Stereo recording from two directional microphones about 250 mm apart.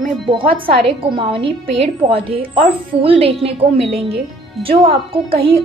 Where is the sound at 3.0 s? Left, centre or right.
Right.